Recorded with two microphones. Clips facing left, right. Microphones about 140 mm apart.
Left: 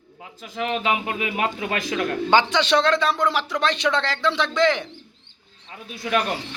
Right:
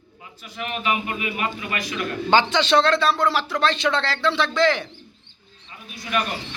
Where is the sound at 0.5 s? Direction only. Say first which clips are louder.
Left 2 dB; 90° left.